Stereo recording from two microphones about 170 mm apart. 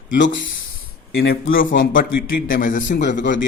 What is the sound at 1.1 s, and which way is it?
Speech, 70° left (ahead or behind).